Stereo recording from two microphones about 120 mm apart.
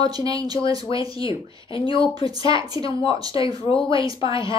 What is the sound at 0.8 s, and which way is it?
Speech, 45° left (ahead or behind).